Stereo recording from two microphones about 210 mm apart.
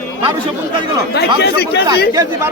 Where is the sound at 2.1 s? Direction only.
15° right (ahead or behind).